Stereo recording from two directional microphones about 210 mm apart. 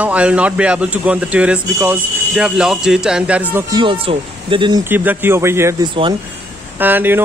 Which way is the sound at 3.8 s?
25° right (ahead or behind).